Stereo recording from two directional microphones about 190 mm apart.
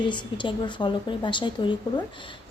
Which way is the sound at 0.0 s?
25° left (ahead or behind).